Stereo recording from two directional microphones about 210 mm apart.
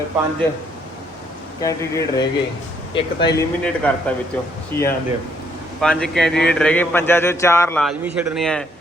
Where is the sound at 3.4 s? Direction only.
5° left (ahead or behind).